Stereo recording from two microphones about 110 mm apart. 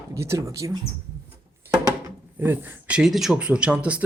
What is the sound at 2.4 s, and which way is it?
Speech, 20° right (ahead or behind).